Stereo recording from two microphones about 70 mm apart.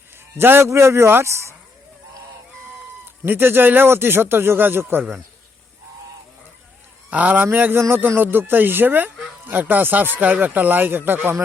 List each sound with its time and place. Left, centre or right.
0.3 s speech: right
3.2 s speech: right
7.1 s speech: right